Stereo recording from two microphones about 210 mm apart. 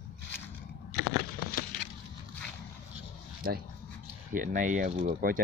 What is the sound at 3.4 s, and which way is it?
Speech, 45° right (ahead or behind).